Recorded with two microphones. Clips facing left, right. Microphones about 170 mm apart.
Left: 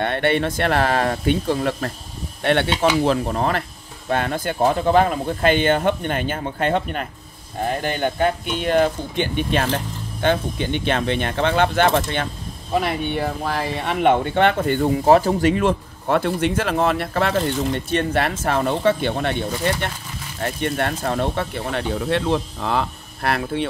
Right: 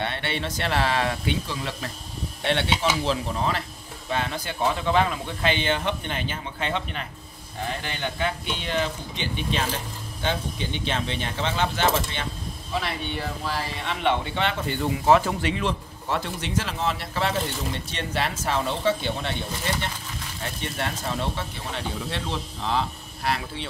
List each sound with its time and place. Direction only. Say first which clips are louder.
0.0 s speech: left 9 dB; 55° left (ahead or behind)